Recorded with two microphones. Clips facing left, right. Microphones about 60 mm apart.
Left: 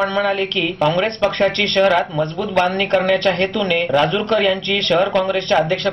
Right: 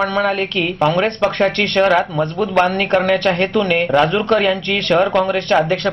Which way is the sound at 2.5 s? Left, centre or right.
Right.